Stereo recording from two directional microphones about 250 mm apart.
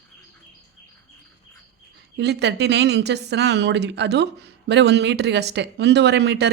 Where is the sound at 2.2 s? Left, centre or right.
Right.